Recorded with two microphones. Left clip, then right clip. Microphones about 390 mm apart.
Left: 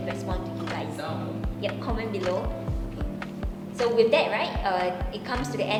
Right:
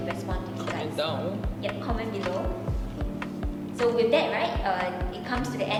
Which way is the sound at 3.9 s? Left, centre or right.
Left.